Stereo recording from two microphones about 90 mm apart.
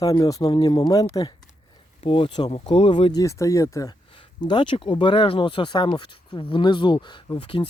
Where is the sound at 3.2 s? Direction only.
35° left (ahead or behind).